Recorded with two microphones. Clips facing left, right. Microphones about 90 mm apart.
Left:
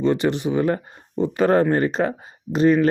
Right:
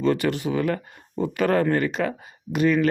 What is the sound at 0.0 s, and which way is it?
Speech, 25° left (ahead or behind).